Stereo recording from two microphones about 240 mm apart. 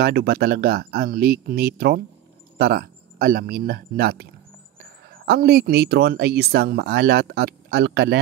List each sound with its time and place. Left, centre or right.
0.0 s speech: right